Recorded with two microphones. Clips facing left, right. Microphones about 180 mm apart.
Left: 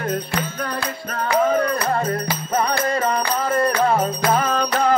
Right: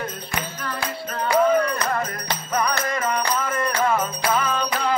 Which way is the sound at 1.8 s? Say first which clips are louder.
Left 4 dB; 30° left (ahead or behind).